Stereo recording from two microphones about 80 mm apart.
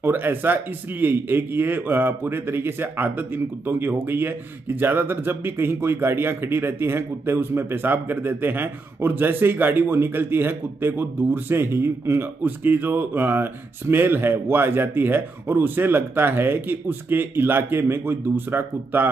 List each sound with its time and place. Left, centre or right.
0.0 s a man's voice: right